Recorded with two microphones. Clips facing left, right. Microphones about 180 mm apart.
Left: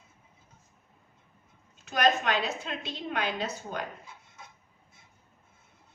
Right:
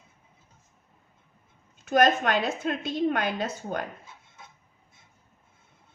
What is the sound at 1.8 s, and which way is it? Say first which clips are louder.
A woman's voice: right 5 dB; 50° right (ahead or behind).